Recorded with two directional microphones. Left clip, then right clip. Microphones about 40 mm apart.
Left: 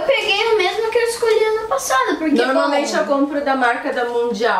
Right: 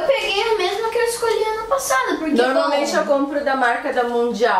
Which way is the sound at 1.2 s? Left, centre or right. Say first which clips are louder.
Left 4 dB; centre.